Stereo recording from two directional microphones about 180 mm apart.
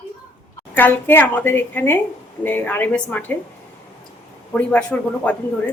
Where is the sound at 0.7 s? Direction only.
10° left (ahead or behind).